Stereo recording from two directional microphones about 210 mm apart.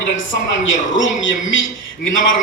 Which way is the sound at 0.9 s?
65° left (ahead or behind).